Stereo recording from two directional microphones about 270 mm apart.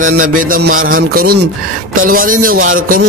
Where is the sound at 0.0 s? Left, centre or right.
Right.